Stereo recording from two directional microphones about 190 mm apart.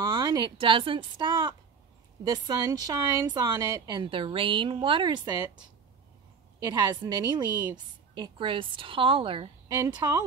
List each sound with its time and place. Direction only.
0.2 s a woman's voice: 25° right (ahead or behind)
6.7 s a woman's voice: 20° right (ahead or behind)